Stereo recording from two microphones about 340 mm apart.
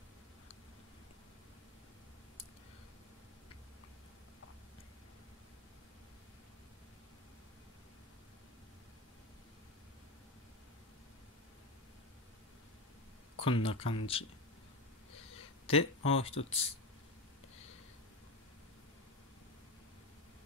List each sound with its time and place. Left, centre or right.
13.4 s speech: centre
15.7 s speech: centre